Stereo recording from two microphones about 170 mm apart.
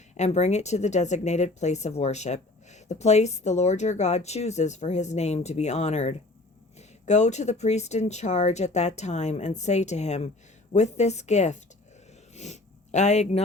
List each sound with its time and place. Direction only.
0.1 s speech: 40° left (ahead or behind)